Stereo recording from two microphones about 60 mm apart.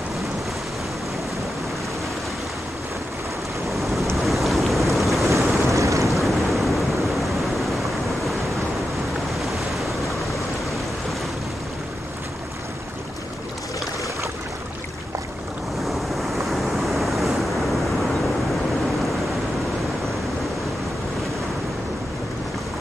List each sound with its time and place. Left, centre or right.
3.7 s wind noise: centre
4.2 s boat: centre
5.6 s waves: right
6.0 s waves: centre
9.4 s waves: centre
15.8 s waves: centre
16.4 s vehicle: centre